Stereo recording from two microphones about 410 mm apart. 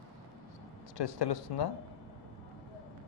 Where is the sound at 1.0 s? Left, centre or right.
Left.